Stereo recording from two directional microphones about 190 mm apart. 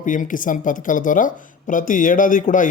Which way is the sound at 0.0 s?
45° left (ahead or behind).